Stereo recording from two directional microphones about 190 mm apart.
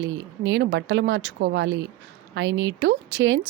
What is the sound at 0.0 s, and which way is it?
A woman's voice, 80° right.